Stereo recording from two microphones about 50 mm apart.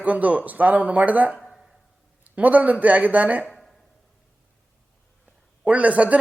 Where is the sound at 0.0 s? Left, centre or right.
Right.